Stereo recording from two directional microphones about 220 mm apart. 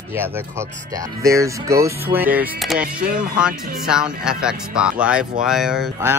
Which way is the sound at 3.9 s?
5° right (ahead or behind).